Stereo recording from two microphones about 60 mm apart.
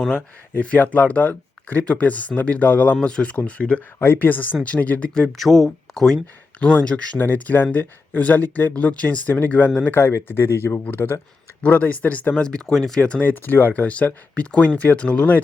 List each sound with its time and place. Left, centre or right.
0.0 s speech: centre
0.8 s speech: left
4.0 s speech: left
5.4 s speech: centre
6.6 s speech: left
9.9 s speech: left
11.6 s speech: left
12.4 s speech: centre
13.0 s speech: centre
13.3 s speech: left